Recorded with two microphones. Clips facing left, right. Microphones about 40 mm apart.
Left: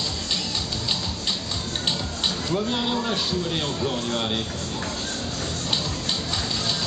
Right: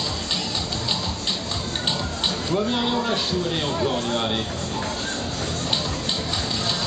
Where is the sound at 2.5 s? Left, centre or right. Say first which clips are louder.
Right 3 dB; centre.